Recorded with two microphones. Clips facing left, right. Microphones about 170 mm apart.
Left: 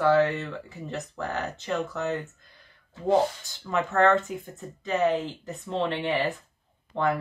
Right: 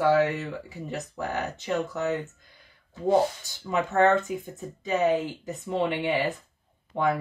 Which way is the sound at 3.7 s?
15° right (ahead or behind).